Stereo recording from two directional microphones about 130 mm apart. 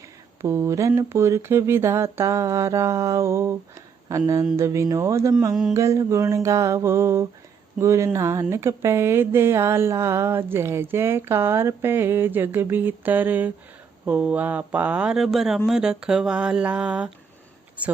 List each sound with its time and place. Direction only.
0.4 s speech: 20° right (ahead or behind)